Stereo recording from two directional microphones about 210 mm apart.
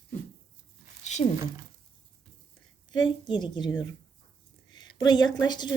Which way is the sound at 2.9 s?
20° left (ahead or behind).